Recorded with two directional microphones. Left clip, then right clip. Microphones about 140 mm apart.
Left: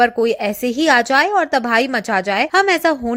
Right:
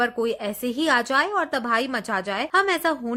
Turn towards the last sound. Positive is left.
turn(degrees=35)  # may be behind; listen again after turning